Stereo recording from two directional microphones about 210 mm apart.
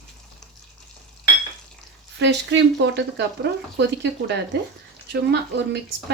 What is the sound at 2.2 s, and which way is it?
Speech, 55° right (ahead or behind).